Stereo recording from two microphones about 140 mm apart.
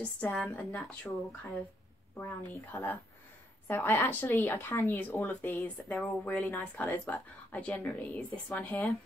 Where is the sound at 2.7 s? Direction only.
20° left (ahead or behind).